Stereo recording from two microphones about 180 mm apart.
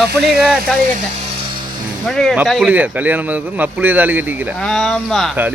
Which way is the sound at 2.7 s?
10° right (ahead or behind).